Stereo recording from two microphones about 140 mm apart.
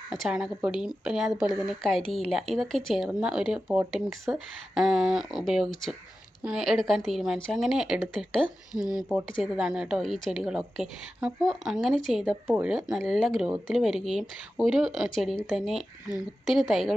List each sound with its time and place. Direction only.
0.1 s a woman's voice: centre (ahead or behind)